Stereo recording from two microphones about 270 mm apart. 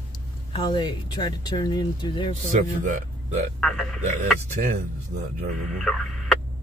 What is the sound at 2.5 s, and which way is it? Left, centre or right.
Speech, right.